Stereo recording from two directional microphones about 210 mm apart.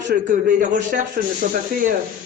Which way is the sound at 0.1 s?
40° right (ahead or behind).